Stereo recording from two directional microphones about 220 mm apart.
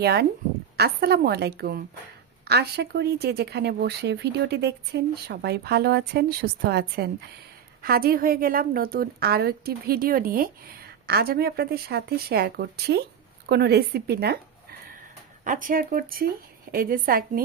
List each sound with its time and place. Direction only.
0.0 s a woman's voice: 45° right (ahead or behind)